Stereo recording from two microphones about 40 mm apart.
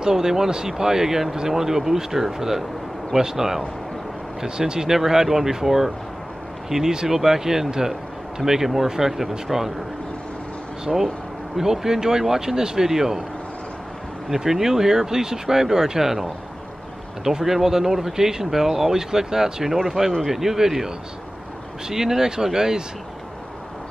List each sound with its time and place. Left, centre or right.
0.0 s speech: centre
10.9 s speech: centre
14.3 s speech: centre